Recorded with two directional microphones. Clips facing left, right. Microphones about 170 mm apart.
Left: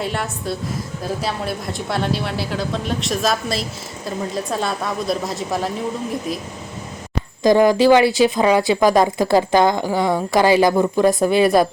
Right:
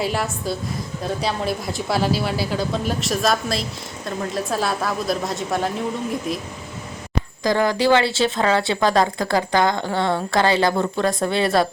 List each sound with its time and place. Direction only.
0.0 s speech: centre (ahead or behind)
7.4 s a woman's voice: 15° left (ahead or behind)